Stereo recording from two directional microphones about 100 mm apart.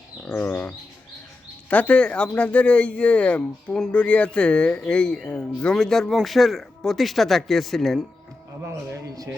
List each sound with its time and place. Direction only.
0.3 s bird: 15° left (ahead or behind)
1.7 s speech: 15° left (ahead or behind)